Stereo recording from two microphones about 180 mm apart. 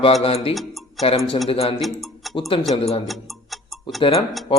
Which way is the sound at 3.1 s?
Centre (ahead or behind).